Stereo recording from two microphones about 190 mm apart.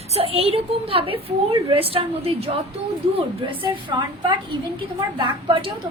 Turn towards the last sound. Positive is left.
turn(degrees=-25)  # may be behind; listen again after turning